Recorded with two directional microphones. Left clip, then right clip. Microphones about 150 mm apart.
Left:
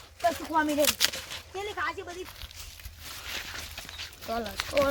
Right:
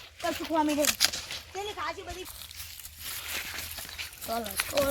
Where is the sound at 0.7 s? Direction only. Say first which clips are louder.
Left 2 dB; 40° left (ahead or behind).